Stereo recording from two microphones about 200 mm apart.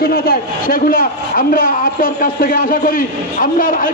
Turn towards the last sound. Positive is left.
turn(degrees=45)  # may be behind; listen again after turning